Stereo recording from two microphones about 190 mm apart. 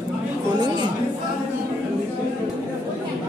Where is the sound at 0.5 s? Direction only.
20° right (ahead or behind).